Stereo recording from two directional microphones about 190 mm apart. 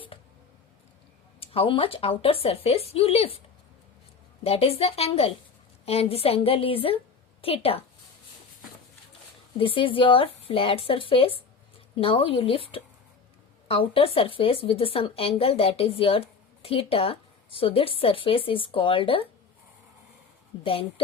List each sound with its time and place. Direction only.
1.4 s speech: 30° left (ahead or behind)
4.4 s speech: 30° left (ahead or behind)
9.6 s speech: 25° left (ahead or behind)